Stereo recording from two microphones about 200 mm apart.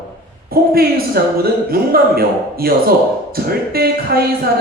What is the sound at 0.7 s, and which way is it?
Speech, 50° right (ahead or behind).